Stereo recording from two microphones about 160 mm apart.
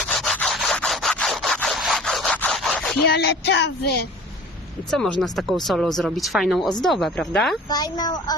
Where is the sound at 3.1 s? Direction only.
90° left.